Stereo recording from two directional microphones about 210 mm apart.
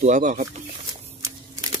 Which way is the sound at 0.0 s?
35° right (ahead or behind).